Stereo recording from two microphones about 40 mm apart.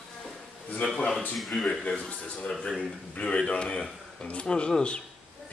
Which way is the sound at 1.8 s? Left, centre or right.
Left.